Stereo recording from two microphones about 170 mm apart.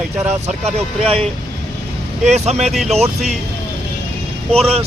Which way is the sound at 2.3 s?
40° right (ahead or behind).